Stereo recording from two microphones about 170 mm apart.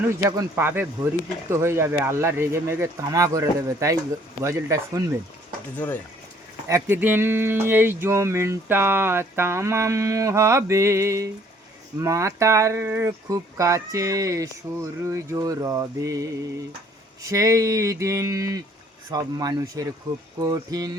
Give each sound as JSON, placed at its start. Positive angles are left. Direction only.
{"t": 0.3, "sound": "speech", "side_deg": -15}
{"t": 5.7, "sound": "speech", "side_deg": 10}
{"t": 6.7, "sound": "speech", "side_deg": -15}